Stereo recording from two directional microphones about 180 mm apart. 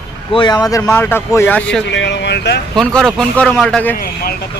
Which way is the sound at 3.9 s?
55° left (ahead or behind).